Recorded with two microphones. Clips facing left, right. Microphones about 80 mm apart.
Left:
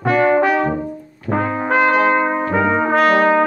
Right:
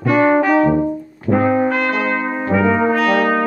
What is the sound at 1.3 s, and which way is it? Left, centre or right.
Brass instrument, left.